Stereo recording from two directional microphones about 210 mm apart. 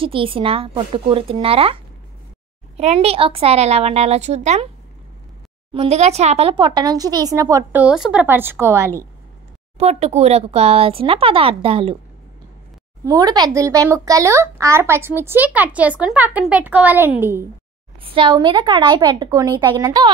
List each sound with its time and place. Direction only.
0.0 s speech: 25° right (ahead or behind)
2.8 s speech: 30° right (ahead or behind)
5.7 s a child's voice: 30° right (ahead or behind); by 8.9 s 10° right (ahead or behind)
9.8 s speech: 30° right (ahead or behind)
13.0 s a child's voice: 15° right (ahead or behind)
18.0 s a child's voice: 25° right (ahead or behind)